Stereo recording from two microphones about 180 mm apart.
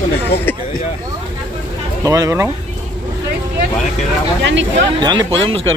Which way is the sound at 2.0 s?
20° right (ahead or behind).